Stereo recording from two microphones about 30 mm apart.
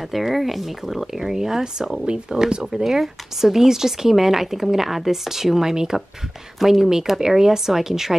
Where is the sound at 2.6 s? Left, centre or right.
Centre.